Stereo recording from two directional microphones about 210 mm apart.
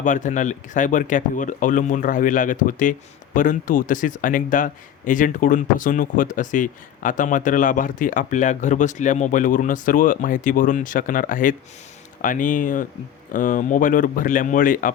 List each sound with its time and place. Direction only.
0.0 s a man's voice: 35° left (ahead or behind)